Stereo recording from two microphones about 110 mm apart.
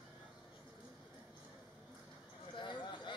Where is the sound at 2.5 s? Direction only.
45° left (ahead or behind).